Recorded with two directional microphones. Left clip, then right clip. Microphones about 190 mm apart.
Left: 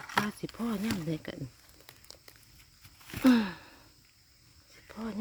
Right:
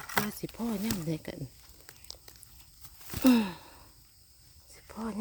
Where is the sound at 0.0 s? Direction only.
45° right (ahead or behind).